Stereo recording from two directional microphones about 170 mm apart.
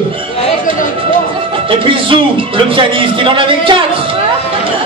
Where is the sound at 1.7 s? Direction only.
30° right (ahead or behind).